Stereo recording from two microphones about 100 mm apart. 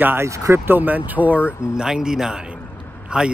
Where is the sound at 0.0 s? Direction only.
25° right (ahead or behind).